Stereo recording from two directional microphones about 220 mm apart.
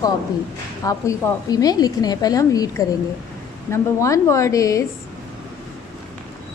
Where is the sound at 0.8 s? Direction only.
15° left (ahead or behind).